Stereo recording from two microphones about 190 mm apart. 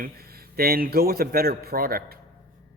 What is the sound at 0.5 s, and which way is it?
A man's voice, 50° right (ahead or behind).